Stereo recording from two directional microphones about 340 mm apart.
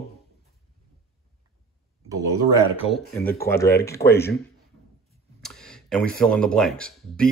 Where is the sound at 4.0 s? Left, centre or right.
Centre.